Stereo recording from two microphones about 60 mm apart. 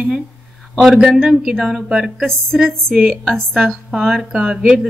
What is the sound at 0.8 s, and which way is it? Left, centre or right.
A woman's voice, centre.